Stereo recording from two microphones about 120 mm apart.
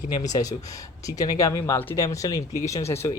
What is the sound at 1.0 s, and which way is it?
Speech, 30° left (ahead or behind).